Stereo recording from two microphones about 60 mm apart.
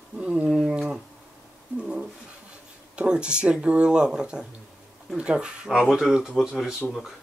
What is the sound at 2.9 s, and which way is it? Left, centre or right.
Speech, centre.